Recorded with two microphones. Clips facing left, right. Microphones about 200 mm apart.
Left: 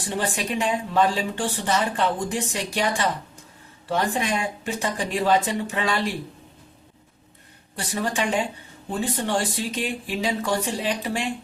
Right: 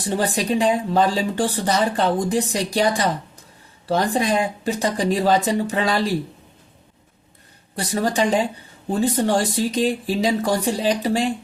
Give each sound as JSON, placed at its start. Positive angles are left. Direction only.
{"t": 0.0, "sound": "speech", "side_deg": -40}
{"t": 7.8, "sound": "speech", "side_deg": -40}